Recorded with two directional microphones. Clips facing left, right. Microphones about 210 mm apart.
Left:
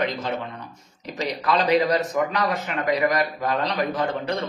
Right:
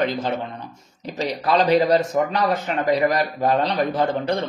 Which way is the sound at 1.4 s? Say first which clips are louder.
Right 3 dB; 30° right (ahead or behind).